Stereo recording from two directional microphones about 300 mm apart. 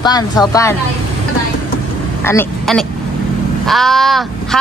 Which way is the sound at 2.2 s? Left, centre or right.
Centre.